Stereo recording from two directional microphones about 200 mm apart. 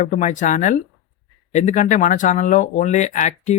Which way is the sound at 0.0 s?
40° left (ahead or behind).